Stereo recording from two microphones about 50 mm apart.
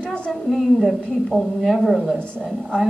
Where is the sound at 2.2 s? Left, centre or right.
Left.